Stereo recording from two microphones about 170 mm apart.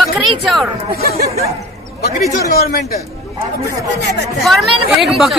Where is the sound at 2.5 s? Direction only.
65° left (ahead or behind).